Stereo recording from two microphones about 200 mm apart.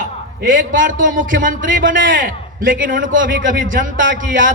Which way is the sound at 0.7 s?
40° right (ahead or behind).